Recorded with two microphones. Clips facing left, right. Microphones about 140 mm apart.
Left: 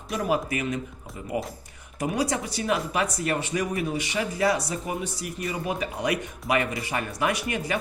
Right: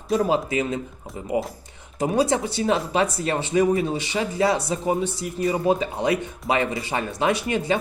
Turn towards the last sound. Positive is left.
turn(degrees=-25)  # may be behind; listen again after turning